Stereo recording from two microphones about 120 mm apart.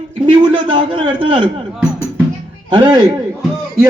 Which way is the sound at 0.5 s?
40° right (ahead or behind).